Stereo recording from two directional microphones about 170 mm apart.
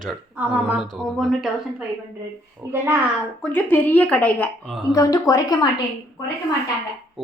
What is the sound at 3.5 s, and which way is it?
A woman's voice, 10° left (ahead or behind).